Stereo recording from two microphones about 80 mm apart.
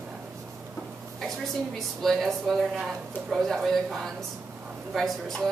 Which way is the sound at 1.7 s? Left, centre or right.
Centre.